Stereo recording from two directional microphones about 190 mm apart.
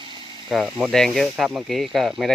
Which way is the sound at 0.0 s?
25° right (ahead or behind).